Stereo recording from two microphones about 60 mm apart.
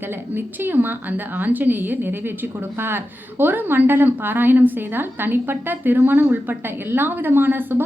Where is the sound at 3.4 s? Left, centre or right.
Right.